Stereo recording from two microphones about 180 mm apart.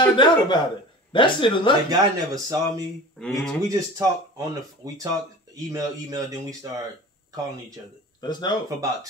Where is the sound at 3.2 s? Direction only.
5° left (ahead or behind).